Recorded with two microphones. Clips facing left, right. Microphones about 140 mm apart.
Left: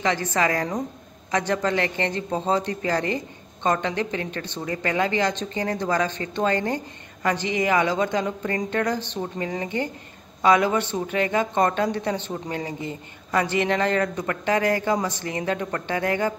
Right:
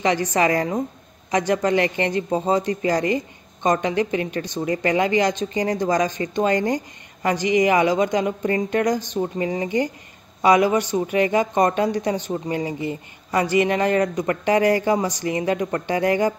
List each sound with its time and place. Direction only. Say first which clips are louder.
0.0 s speech: right 3 dB; 15° right (ahead or behind)